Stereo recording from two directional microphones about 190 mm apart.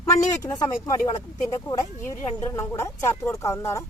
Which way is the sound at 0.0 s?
15° left (ahead or behind).